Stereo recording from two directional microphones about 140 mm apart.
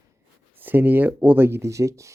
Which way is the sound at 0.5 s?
15° right (ahead or behind).